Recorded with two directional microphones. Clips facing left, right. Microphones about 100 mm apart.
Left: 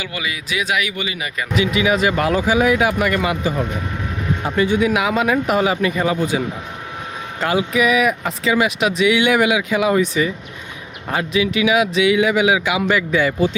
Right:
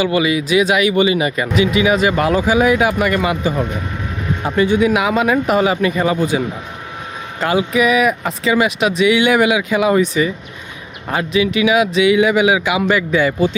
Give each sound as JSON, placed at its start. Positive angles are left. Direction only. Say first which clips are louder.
{"t": 0.0, "sound": "speech", "louder": "right 11 dB", "side_deg": -25}
{"t": 7.4, "sound": "speech", "louder": "right 2 dB", "side_deg": -30}